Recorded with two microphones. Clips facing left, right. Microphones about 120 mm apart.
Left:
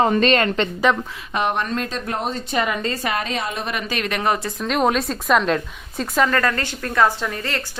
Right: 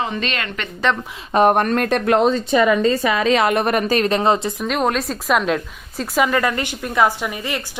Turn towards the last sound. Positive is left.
turn(degrees=-15)  # may be behind; listen again after turning